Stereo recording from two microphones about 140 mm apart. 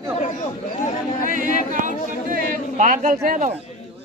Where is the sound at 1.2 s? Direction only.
70° right (ahead or behind).